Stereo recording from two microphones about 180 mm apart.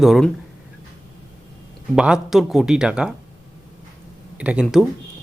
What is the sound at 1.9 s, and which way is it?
Speech, 5° right (ahead or behind).